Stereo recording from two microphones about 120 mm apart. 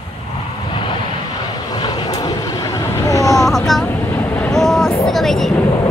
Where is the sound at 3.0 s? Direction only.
30° left (ahead or behind).